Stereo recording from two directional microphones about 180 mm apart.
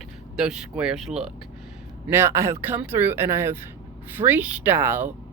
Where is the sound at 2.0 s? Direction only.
15° right (ahead or behind).